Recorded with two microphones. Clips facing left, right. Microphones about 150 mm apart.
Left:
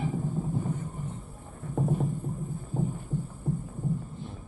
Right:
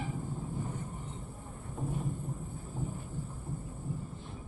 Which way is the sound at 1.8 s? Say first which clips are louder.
Left 9 dB; 55° left (ahead or behind).